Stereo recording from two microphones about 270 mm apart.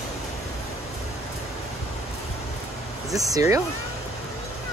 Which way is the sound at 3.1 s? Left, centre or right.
Centre.